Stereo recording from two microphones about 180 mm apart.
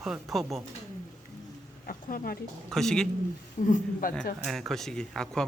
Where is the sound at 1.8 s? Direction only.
50° left (ahead or behind).